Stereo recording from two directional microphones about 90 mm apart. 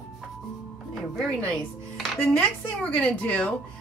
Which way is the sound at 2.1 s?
20° left (ahead or behind).